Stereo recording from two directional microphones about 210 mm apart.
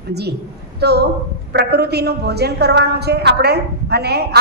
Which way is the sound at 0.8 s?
50° right (ahead or behind).